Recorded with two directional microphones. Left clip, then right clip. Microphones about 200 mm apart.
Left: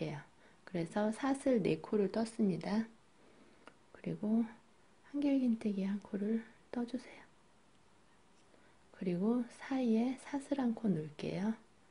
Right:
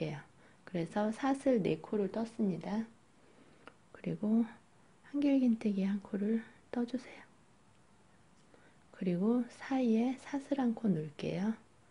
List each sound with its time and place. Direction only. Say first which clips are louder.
0.0 s speech: right 2 dB; 5° right (ahead or behind)
3.6 s whispering: right 2 dB; 10° right (ahead or behind)
5.0 s speech: right 3 dB; 10° right (ahead or behind)
8.9 s speech: right 2 dB; 10° right (ahead or behind)